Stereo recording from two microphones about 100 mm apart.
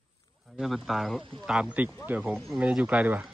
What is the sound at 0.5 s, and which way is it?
Speech, centre (ahead or behind).